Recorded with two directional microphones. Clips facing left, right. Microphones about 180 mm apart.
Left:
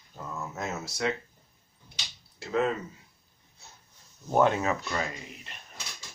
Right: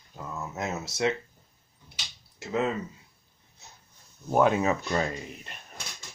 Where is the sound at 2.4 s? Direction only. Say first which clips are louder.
Left 1 dB; 20° right (ahead or behind).